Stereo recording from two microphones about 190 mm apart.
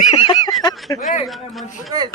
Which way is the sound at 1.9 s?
20° right (ahead or behind).